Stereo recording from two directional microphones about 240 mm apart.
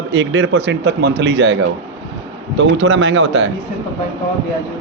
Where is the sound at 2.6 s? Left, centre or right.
Right.